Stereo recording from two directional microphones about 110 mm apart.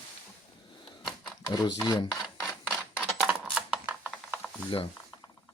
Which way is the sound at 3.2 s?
5° right (ahead or behind).